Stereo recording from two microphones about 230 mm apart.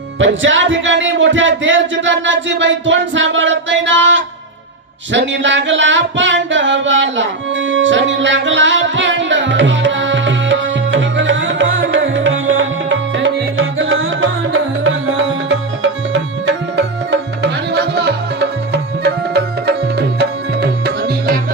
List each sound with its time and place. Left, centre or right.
0.2 s music: right